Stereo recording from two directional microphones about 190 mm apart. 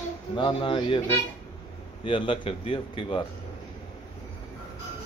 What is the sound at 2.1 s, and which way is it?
Speech, 25° left (ahead or behind).